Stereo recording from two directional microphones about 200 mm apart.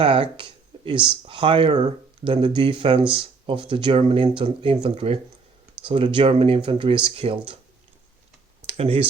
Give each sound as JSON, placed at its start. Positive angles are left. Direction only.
{"t": 0.0, "sound": "a sound", "side_deg": -25}
{"t": 1.0, "sound": "speech", "side_deg": -25}
{"t": 8.6, "sound": "computer keyboard", "side_deg": -30}